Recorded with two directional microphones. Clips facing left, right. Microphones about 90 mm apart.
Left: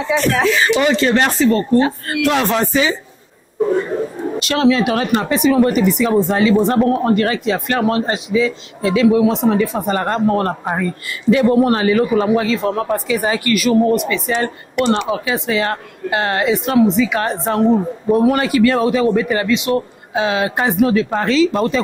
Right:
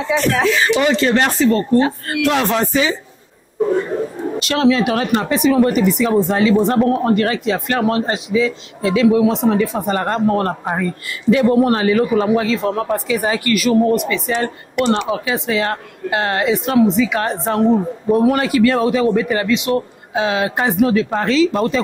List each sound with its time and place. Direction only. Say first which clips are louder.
0.0 s a man's voice: even; 15° left (ahead or behind)
3.6 s a sound: even; 25° left (ahead or behind)
4.4 s a man's voice: even; 10° left (ahead or behind)